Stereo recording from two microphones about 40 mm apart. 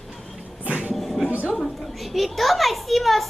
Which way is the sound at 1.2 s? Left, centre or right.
Centre.